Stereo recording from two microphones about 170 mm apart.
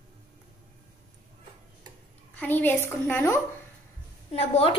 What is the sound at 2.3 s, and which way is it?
A woman's voice, 10° left (ahead or behind).